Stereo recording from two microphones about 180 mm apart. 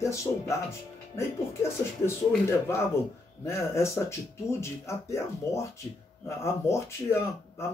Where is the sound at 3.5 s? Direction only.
15° left (ahead or behind).